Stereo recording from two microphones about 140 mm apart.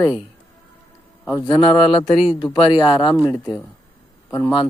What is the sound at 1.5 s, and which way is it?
Speech, 40° left (ahead or behind).